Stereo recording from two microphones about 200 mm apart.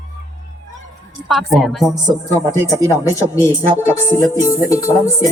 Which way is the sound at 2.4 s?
15° left (ahead or behind).